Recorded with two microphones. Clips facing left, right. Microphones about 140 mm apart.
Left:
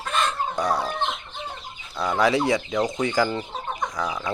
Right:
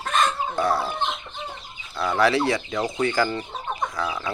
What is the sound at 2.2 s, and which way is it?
Speech, 20° left (ahead or behind).